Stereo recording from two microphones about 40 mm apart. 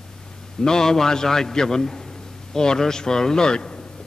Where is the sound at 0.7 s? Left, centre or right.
Centre.